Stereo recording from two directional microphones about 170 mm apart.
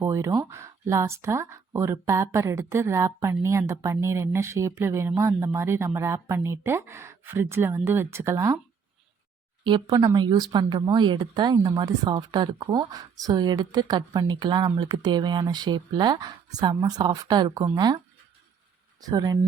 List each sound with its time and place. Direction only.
0.0 s speech: 15° right (ahead or behind)
9.6 s a woman's voice: 25° right (ahead or behind)